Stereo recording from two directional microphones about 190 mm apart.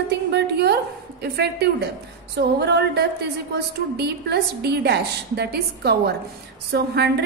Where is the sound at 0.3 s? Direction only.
60° right (ahead or behind).